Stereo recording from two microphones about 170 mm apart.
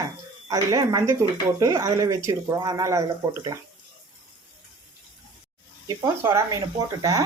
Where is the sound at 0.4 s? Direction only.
20° right (ahead or behind).